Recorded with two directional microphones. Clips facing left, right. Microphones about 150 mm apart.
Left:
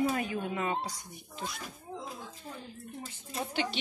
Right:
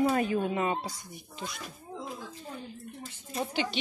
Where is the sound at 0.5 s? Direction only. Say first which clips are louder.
Right 3 dB; 25° right (ahead or behind).